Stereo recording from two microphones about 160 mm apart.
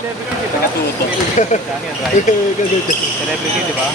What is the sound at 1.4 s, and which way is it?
Speech, 50° left (ahead or behind).